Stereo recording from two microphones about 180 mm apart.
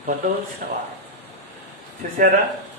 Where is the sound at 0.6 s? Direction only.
45° right (ahead or behind).